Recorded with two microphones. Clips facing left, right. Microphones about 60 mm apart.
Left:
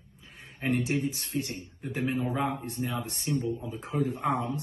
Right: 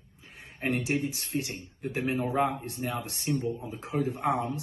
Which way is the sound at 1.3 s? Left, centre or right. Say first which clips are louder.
Even; right.